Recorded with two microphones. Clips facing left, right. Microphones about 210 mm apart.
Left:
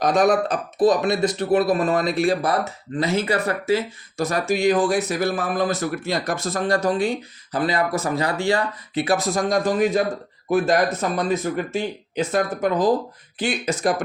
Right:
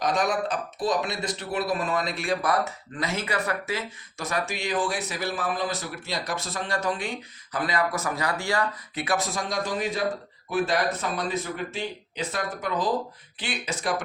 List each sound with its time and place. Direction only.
0.0 s speech: 40° left (ahead or behind)